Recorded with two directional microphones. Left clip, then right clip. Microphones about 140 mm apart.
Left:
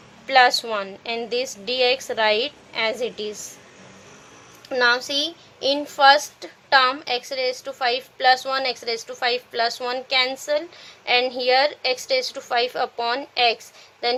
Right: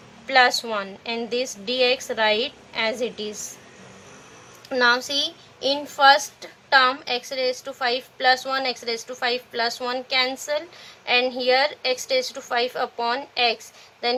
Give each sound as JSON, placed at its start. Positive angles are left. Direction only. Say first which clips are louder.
{"t": 0.3, "sound": "a child's voice", "louder": "left 2 dB", "side_deg": 35}
{"t": 4.7, "sound": "a child's voice", "louder": "even", "side_deg": 35}